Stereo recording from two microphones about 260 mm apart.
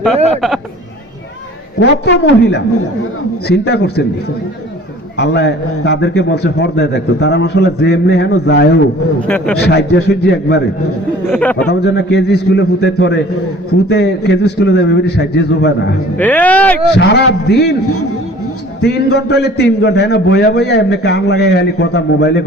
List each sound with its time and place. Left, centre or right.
1.8 s speech: left
3.7 s a man's voice: left
5.1 s a man's voice: left
9.2 s speech: centre
9.6 s a man's voice: left
11.3 s speech: centre
11.7 s a man's voice: left
16.1 s speech: centre
17.0 s a man's voice: left
18.8 s a man's voice: left